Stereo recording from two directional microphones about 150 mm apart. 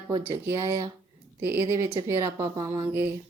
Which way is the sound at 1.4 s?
15° right (ahead or behind).